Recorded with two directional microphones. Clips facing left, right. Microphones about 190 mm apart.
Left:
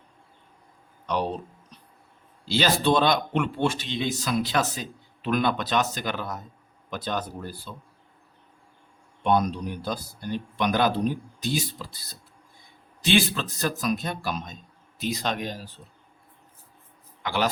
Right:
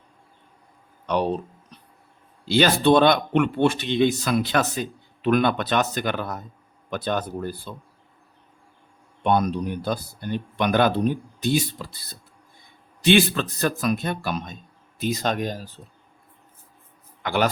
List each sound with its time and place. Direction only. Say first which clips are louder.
2.5 s speech: right 5 dB; 55° right (ahead or behind)
9.2 s speech: right 2 dB; 55° right (ahead or behind)
17.2 s a man's voice: right 4 dB; 55° right (ahead or behind)